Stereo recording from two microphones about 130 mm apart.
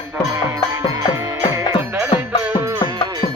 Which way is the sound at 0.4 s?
25° right (ahead or behind).